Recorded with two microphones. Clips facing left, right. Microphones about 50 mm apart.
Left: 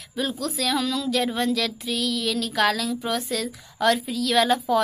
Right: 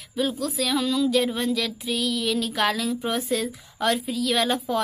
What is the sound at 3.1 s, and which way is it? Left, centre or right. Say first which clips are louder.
Speech: right 1 dB; centre.